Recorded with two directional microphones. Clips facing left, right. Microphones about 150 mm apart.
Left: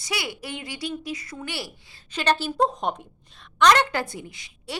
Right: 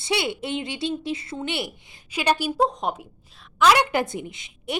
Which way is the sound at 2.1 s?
10° right (ahead or behind).